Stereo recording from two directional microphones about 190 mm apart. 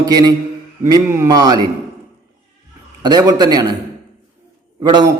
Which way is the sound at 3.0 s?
20° right (ahead or behind).